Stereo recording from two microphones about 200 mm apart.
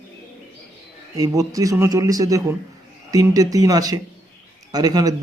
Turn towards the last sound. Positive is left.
turn(degrees=-20)  # may be behind; listen again after turning